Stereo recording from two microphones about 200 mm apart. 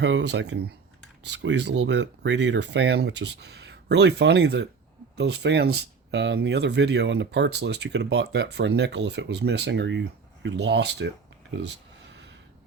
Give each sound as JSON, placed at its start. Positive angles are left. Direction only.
{"t": 0.0, "sound": "speech", "side_deg": -65}